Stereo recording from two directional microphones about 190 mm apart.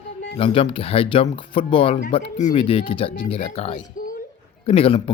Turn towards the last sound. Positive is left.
turn(degrees=30)  # may be behind; listen again after turning